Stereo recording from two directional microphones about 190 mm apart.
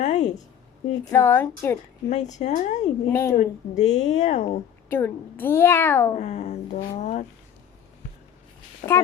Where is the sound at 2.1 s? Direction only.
40° left (ahead or behind).